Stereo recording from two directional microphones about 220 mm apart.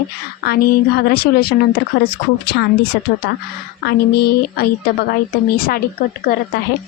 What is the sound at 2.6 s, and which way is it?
Speech, 50° left (ahead or behind).